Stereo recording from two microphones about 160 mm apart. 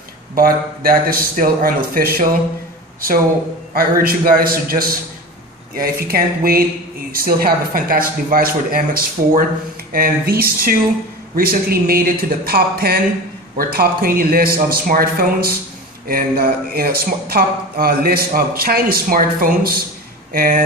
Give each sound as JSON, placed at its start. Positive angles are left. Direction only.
{"t": 0.4, "sound": "speech", "side_deg": -65}
{"t": 3.7, "sound": "speech", "side_deg": -65}